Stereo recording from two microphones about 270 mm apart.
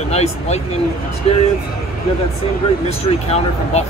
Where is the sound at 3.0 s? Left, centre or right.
Left.